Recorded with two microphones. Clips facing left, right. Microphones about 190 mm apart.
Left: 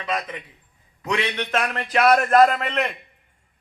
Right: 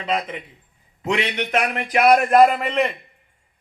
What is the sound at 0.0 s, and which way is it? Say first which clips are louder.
A man's voice: right 3 dB; 25° right (ahead or behind).